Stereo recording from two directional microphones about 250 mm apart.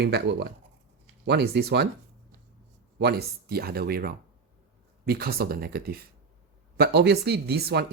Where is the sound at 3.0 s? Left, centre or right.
Right.